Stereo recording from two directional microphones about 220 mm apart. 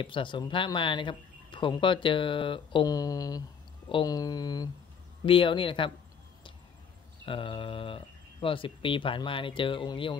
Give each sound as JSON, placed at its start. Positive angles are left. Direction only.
{"t": 0.0, "sound": "speech", "side_deg": 20}
{"t": 7.2, "sound": "speech", "side_deg": 25}